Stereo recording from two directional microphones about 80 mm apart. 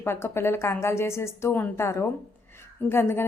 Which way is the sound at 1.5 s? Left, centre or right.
Left.